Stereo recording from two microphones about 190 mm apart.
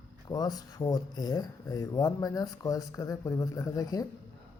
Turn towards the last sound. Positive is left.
turn(degrees=20)  # may be behind; listen again after turning